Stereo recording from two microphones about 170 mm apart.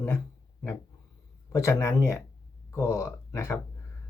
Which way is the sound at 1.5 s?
15° left (ahead or behind).